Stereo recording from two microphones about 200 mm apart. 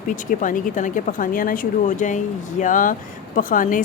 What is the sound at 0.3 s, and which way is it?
Speech, 40° left (ahead or behind).